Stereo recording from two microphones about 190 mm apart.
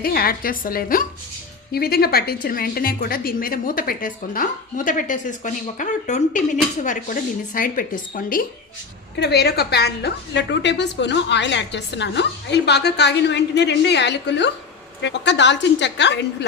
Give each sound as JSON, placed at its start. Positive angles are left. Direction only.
{"t": 0.0, "sound": "a woman's voice", "side_deg": 50}
{"t": 9.1, "sound": "a woman's voice", "side_deg": 60}